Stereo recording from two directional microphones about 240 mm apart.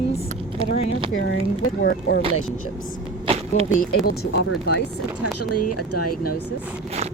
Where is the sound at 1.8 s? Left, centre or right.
Left.